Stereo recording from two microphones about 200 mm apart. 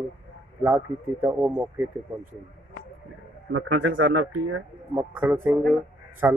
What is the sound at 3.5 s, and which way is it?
Speech, 70° right (ahead or behind).